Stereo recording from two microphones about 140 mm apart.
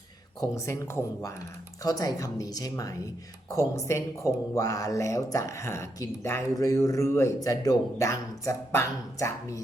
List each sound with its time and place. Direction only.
0.3 s speech: 20° left (ahead or behind)